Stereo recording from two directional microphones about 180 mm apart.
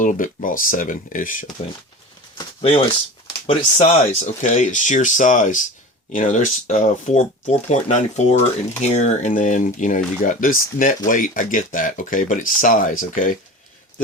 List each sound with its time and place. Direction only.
0.0 s speech: 45° left (ahead or behind)
2.6 s speech: 30° left (ahead or behind); by 13.4 s 45° left (ahead or behind)